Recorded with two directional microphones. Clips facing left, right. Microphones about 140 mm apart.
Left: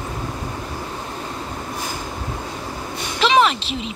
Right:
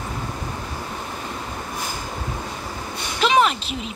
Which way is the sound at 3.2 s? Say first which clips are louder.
Left 2 dB; 90° left.